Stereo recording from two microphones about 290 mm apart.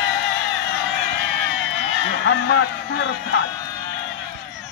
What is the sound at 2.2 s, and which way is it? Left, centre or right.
Speech, left.